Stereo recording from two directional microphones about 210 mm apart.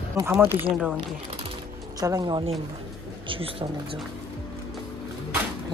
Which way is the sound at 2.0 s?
20° right (ahead or behind).